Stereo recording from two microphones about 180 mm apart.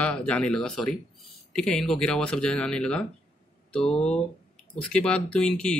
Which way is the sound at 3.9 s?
35° left (ahead or behind).